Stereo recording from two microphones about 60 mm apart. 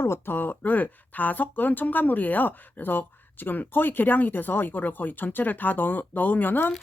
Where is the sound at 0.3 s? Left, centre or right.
Left.